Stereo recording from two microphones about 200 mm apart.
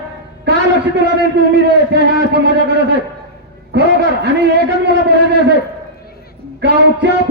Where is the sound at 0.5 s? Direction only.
55° right (ahead or behind).